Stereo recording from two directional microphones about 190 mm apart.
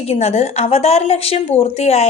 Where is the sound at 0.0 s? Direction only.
30° left (ahead or behind).